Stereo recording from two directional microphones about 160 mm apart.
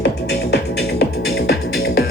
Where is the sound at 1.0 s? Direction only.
90° left.